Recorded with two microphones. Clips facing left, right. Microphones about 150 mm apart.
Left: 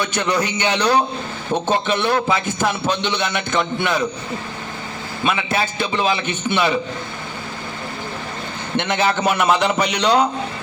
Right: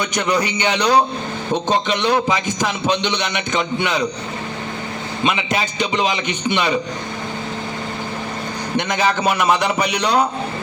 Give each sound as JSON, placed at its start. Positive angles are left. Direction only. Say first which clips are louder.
{"t": 0.0, "sound": "a man's voice", "louder": "right 1 dB", "side_deg": -15}
{"t": 5.2, "sound": "a man's voice", "louder": "even", "side_deg": -15}
{"t": 8.7, "sound": "a man's voice", "louder": "even", "side_deg": -15}